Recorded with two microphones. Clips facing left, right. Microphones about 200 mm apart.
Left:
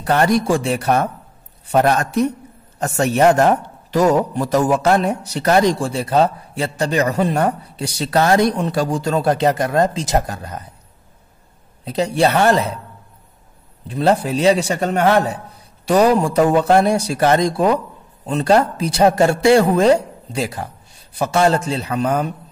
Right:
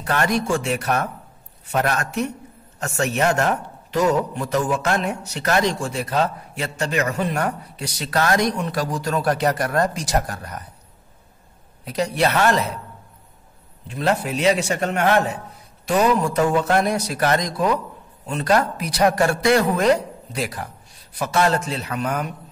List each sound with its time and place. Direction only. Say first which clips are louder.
0.0 s a man's voice: left 6 dB; 35° left (ahead or behind)
11.8 s a man's voice: left 4 dB; 30° left (ahead or behind)
13.8 s a man's voice: left 5 dB; 35° left (ahead or behind)